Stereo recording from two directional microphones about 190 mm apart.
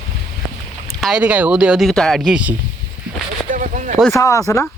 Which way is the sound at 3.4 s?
45° right (ahead or behind).